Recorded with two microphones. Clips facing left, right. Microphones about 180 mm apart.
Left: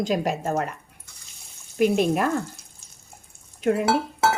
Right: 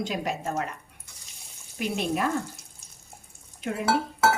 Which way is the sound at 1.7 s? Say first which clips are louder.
Left 8 dB; 50° left (ahead or behind).